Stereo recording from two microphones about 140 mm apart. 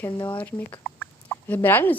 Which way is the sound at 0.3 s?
15° left (ahead or behind).